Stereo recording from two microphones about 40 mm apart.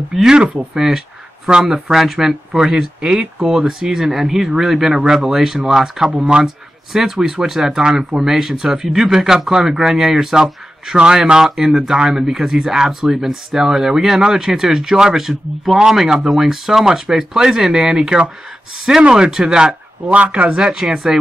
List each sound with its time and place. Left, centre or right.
0.1 s speech: centre
6.1 s speech: right
6.4 s speech: centre
15.1 s speech: centre
20.1 s speech: right; by 21.2 s centre